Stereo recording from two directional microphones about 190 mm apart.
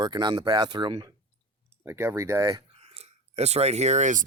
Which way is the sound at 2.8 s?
30° right (ahead or behind).